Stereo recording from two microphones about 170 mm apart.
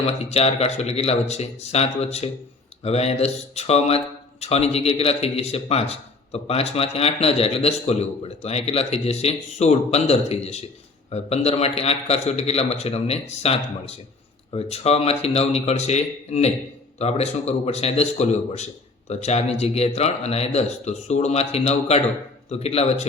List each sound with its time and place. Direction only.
0.0 s speech: 40° left (ahead or behind)